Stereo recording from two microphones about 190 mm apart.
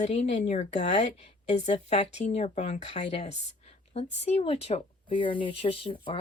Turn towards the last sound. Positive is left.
turn(degrees=30)  # may be behind; listen again after turning